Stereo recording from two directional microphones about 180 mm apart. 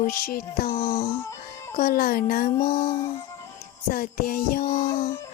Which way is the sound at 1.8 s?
55° left (ahead or behind).